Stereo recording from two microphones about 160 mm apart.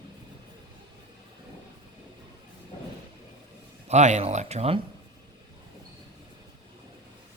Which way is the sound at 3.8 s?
45° right (ahead or behind).